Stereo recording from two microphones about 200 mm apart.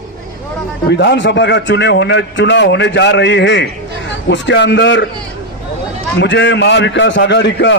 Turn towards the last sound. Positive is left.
turn(degrees=60)  # may be behind; listen again after turning